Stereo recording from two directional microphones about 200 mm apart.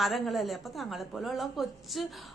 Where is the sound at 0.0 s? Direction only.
Centre (ahead or behind).